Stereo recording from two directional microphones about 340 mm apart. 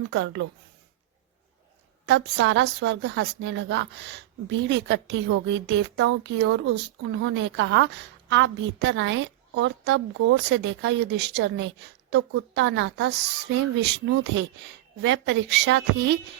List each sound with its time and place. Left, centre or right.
0.1 s a woman's voice: right
2.0 s a woman's voice: right
15.0 s a woman's voice: right